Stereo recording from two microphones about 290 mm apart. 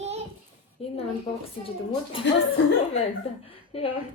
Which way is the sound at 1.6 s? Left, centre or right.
Centre.